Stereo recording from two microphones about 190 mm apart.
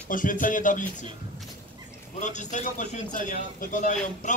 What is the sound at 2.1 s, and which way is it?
A man's voice, 40° left (ahead or behind).